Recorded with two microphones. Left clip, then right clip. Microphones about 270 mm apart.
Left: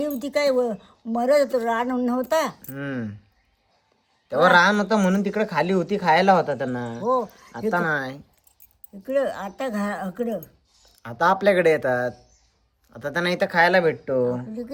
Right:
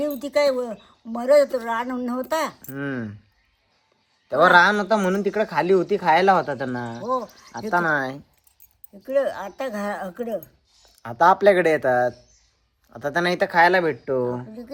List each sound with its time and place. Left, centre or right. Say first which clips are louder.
0.0 s speech: right 2 dB; centre
2.6 s speech: right 1 dB; centre
4.3 s speech: right 2 dB; centre
7.1 s speech: left 3 dB; centre
7.7 s speech: right 2 dB; centre
9.0 s speech: right 1 dB; centre
11.0 s speech: right 4 dB; centre